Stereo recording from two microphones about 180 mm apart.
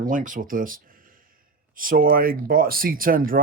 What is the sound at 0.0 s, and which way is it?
Speech, 50° right (ahead or behind).